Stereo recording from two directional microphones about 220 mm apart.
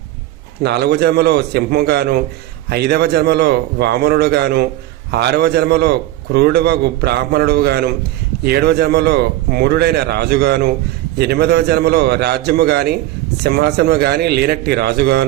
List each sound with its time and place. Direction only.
0.6 s a man's voice: 50° right (ahead or behind)